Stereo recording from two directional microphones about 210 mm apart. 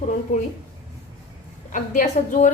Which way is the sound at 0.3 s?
35° left (ahead or behind).